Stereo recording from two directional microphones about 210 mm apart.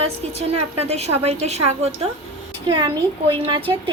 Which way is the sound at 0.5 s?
30° right (ahead or behind).